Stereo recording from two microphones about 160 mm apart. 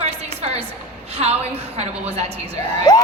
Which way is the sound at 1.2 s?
40° right (ahead or behind).